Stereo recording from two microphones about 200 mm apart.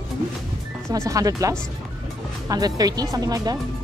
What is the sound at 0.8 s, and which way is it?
Speech, 15° right (ahead or behind).